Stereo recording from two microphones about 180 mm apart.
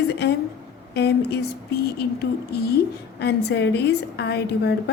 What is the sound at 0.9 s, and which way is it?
A woman's voice, 65° left (ahead or behind).